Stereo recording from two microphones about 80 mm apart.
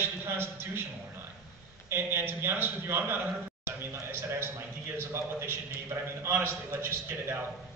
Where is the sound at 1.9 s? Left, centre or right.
Right.